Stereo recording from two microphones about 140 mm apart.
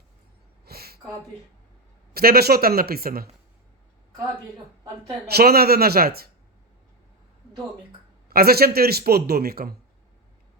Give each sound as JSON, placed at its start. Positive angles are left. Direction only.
{"t": 0.6, "sound": "a sound", "side_deg": -90}
{"t": 2.1, "sound": "a man's voice", "side_deg": -90}
{"t": 5.4, "sound": "a man's voice", "side_deg": -90}
{"t": 8.3, "sound": "a man's voice", "side_deg": -90}